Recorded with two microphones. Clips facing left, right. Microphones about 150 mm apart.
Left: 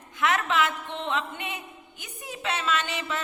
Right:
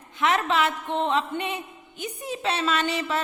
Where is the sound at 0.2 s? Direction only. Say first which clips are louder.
Right 2 dB; 30° right (ahead or behind).